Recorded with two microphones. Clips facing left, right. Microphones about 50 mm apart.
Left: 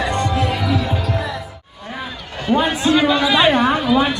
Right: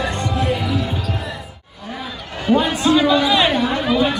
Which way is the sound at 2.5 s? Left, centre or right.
Centre.